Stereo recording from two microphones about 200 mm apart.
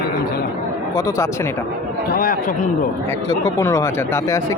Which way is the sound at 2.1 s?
45° left (ahead or behind).